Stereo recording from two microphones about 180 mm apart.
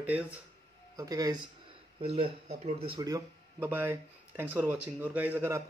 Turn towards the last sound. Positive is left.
turn(degrees=-15)  # may be behind; listen again after turning